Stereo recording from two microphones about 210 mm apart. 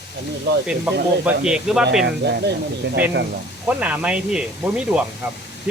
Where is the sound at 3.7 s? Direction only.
5° right (ahead or behind).